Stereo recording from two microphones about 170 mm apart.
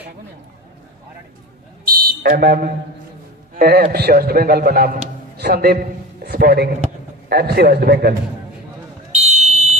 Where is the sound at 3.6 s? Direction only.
70° right (ahead or behind).